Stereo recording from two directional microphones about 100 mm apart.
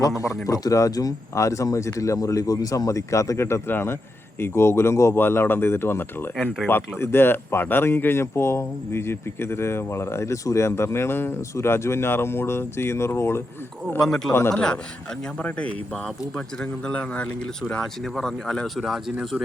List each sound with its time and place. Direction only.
0.4 s speech: 35° left (ahead or behind)
6.3 s speech: 5° right (ahead or behind)
6.7 s speech: 20° left (ahead or behind)
14.0 s speech: 5° left (ahead or behind)
16.8 s speech: 10° left (ahead or behind)